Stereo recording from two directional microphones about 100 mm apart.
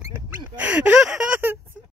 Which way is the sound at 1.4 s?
20° right (ahead or behind).